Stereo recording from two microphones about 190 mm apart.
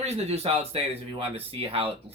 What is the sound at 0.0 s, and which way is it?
Speech, 35° right (ahead or behind).